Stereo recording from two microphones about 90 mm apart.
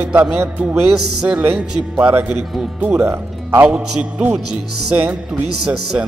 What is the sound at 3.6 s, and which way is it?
Speech, 10° right (ahead or behind).